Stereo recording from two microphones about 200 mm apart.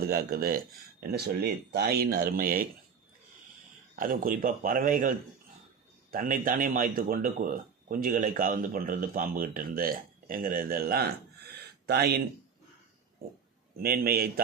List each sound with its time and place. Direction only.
0.0 s speech: 50° right (ahead or behind)
3.9 s speech: 45° right (ahead or behind)
13.8 s speech: 50° right (ahead or behind)